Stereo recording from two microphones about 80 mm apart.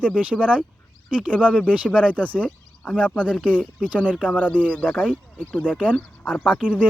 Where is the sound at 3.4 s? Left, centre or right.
Centre.